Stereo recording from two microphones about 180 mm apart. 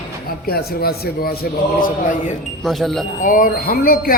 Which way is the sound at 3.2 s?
50° left (ahead or behind).